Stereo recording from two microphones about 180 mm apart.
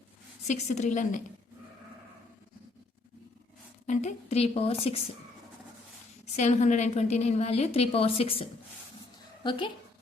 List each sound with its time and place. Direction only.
0.4 s a woman's voice: 40° left (ahead or behind)
3.8 s a woman's voice: 35° left (ahead or behind)
6.3 s a woman's voice: 40° left (ahead or behind)